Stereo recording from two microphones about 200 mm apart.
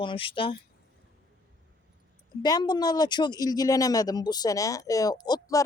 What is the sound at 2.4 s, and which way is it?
A woman's voice, 20° left (ahead or behind).